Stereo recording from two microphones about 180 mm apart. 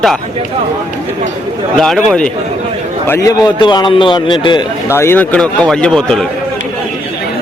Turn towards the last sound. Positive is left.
turn(degrees=5)  # may be behind; listen again after turning